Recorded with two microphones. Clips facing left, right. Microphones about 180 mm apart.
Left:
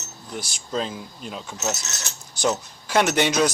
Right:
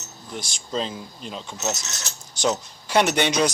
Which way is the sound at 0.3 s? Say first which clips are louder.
Even; 5° left (ahead or behind).